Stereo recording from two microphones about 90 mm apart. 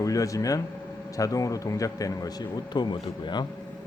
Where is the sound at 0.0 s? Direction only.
40° left (ahead or behind); by 3.4 s 60° left (ahead or behind).